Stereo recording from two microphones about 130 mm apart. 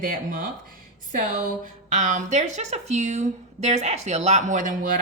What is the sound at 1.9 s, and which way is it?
A woman's voice, 70° right (ahead or behind).